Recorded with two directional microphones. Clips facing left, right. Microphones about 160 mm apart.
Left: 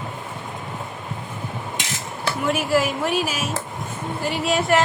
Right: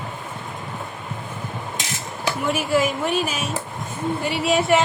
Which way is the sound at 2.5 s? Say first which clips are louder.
Even; centre (ahead or behind).